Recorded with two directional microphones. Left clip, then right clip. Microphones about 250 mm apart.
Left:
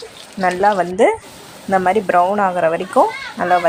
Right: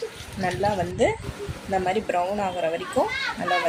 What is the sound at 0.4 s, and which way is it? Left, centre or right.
Speech, centre.